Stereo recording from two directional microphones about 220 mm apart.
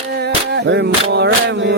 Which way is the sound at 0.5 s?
50° right (ahead or behind).